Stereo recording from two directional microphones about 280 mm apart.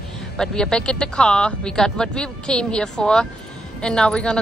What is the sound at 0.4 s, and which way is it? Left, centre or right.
A woman's voice, centre.